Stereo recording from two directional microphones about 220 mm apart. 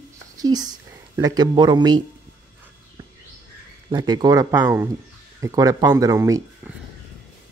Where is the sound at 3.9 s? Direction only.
20° right (ahead or behind).